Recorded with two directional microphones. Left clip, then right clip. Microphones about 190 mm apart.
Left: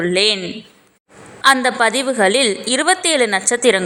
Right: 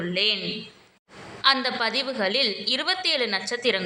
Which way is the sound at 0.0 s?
50° left (ahead or behind).